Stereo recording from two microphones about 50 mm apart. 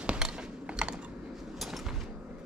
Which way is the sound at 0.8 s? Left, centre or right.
Centre.